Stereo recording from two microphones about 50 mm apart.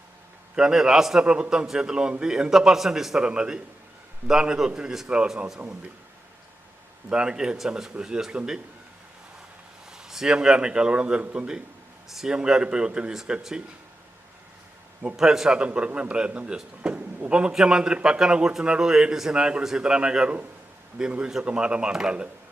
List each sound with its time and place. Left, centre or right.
0.5 s a man's voice: centre
5.6 s speech: right
7.1 s a man's voice: centre
9.9 s a man's voice: centre
15.1 s a man's voice: centre